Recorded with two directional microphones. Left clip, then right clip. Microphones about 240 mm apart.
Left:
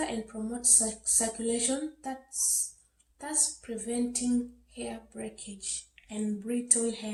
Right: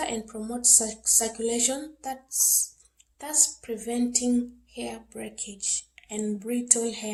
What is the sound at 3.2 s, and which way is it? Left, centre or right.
A woman's voice, right.